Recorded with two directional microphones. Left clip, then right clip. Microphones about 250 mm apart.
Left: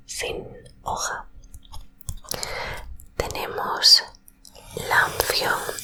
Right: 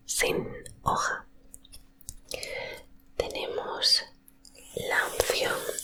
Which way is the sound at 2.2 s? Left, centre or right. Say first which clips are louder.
Left 5 dB; centre.